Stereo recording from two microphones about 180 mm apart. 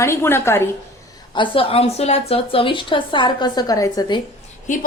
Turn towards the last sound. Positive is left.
turn(degrees=45)  # may be behind; listen again after turning